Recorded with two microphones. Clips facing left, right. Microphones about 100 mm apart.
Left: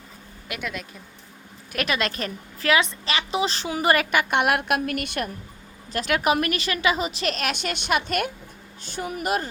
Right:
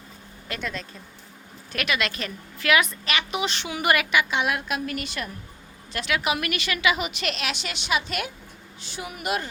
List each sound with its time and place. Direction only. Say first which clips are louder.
0.4 s speech: even; 10° left (ahead or behind)
1.7 s a woman's voice: left 2 dB; 35° left (ahead or behind); by 5.3 s 55° left (ahead or behind)
5.9 s a woman's voice: left 4 dB; 40° left (ahead or behind)